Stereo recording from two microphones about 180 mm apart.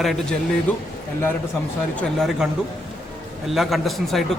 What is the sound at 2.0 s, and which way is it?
Speech, centre (ahead or behind).